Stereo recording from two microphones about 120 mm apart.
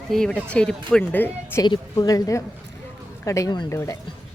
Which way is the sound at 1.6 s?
35° left (ahead or behind).